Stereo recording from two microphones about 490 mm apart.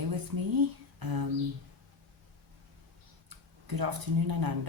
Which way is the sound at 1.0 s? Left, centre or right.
Right.